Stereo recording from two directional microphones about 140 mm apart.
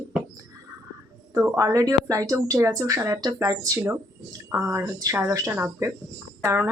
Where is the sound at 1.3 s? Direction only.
20° right (ahead or behind).